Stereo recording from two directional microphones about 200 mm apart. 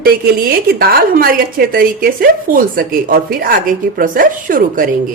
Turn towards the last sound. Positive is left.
turn(degrees=-45)  # may be behind; listen again after turning